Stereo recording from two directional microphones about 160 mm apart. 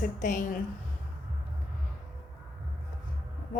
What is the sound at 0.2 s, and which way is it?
Speech, 50° left (ahead or behind).